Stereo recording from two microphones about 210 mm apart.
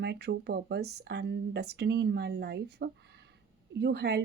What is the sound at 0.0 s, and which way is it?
A woman's voice, 50° right (ahead or behind).